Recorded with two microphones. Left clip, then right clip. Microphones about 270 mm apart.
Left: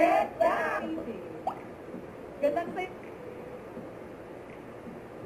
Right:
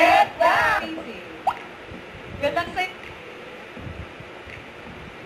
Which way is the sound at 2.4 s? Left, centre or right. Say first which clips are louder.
Right 5 dB; centre.